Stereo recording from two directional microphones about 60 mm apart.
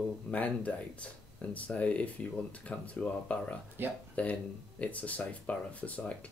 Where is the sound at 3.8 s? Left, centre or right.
Right.